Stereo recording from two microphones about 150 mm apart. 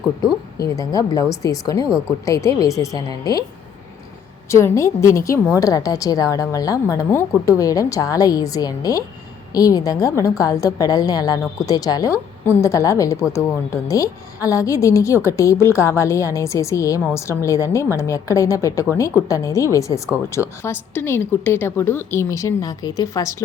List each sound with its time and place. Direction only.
0.6 s a woman's voice: 25° left (ahead or behind)
4.5 s a woman's voice: 20° left (ahead or behind)